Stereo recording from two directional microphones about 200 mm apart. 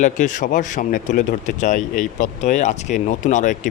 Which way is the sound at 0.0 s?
40° left (ahead or behind).